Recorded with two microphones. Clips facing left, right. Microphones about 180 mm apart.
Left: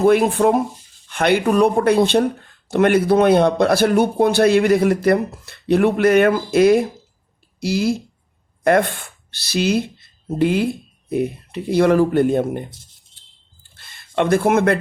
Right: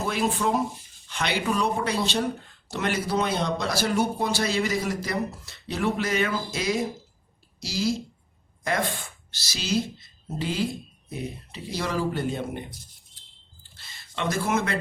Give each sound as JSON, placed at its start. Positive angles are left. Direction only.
{"t": 0.0, "sound": "a man's voice", "side_deg": 55}
{"t": 13.1, "sound": "smoke detector", "side_deg": 25}
{"t": 13.6, "sound": "a sound", "side_deg": 55}